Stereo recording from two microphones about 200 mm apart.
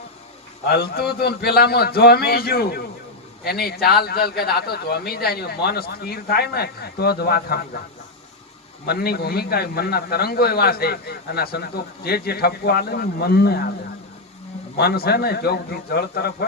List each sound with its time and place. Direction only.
0.7 s a man's voice: 50° left (ahead or behind)
8.9 s a man's voice: 50° left (ahead or behind)
14.8 s a man's voice: 50° left (ahead or behind)